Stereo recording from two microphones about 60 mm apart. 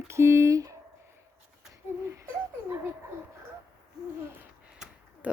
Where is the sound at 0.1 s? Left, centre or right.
Right.